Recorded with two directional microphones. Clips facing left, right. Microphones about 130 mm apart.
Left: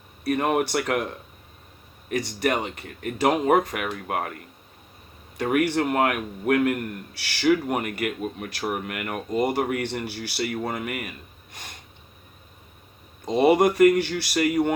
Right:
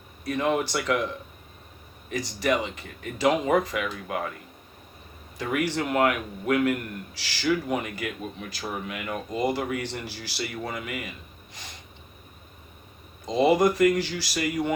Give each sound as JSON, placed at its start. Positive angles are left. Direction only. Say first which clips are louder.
{"t": 0.3, "sound": "a man's voice", "louder": "left 3 dB", "side_deg": 60}
{"t": 2.0, "sound": "a man's voice", "louder": "left 1 dB", "side_deg": 60}
{"t": 5.4, "sound": "a man's voice", "louder": "left 5 dB", "side_deg": 60}
{"t": 13.2, "sound": "a man's voice", "louder": "left 2 dB", "side_deg": 65}